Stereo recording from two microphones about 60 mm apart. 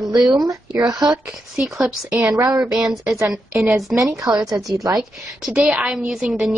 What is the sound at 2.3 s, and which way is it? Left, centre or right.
Speech, right.